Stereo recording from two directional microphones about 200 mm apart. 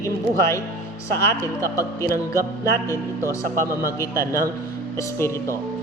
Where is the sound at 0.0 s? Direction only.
15° left (ahead or behind).